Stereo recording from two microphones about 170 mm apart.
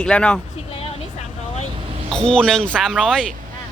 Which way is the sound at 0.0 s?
5° left (ahead or behind).